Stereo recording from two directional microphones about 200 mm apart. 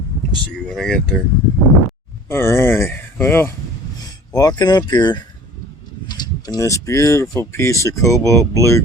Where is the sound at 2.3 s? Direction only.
10° left (ahead or behind).